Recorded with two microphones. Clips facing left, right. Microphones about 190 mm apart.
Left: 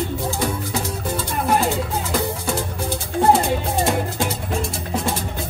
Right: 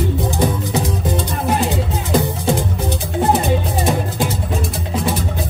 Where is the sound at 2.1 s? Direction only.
15° right (ahead or behind).